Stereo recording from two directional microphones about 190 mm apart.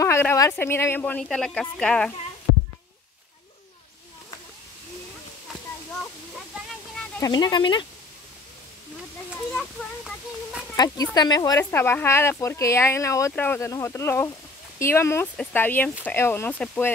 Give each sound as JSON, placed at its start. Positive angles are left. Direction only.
{"t": 0.0, "sound": "speech", "side_deg": 15}
{"t": 7.2, "sound": "speech", "side_deg": 20}
{"t": 9.5, "sound": "a sound", "side_deg": 5}
{"t": 11.1, "sound": "speech", "side_deg": 20}